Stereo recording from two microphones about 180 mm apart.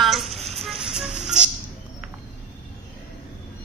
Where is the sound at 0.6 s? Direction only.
5° right (ahead or behind).